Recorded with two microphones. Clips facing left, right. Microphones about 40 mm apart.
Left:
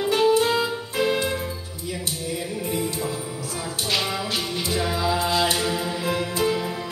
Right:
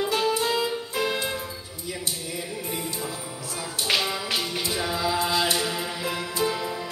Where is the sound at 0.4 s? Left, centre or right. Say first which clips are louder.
Left 3 dB; centre.